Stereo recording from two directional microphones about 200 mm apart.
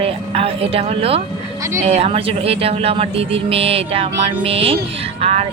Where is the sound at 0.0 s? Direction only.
30° right (ahead or behind).